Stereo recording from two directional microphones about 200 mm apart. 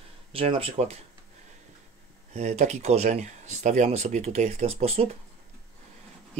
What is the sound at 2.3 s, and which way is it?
Speech, 35° right (ahead or behind).